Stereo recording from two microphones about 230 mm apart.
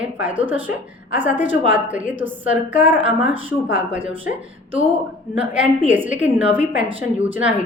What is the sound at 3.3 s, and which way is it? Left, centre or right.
Speech, right.